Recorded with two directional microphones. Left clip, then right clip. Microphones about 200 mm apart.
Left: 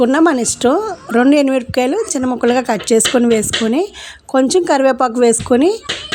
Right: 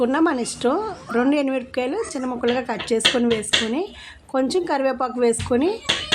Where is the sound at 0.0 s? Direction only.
35° left (ahead or behind).